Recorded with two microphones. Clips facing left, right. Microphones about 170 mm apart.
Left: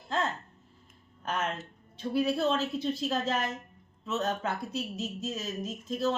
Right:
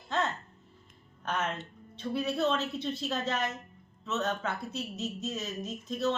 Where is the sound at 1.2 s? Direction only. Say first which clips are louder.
Even; 10° left (ahead or behind).